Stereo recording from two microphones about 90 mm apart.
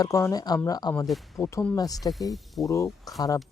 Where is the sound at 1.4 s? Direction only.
35° left (ahead or behind).